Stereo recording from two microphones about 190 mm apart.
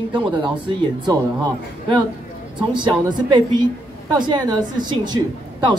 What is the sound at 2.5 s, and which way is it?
Speech, 25° right (ahead or behind).